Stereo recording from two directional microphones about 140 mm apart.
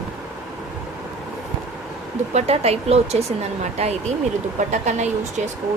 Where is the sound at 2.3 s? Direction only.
50° right (ahead or behind).